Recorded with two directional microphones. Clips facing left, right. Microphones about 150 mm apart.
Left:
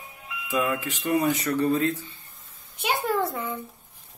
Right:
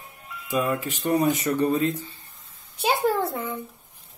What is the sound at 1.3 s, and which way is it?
Speech, 20° right (ahead or behind).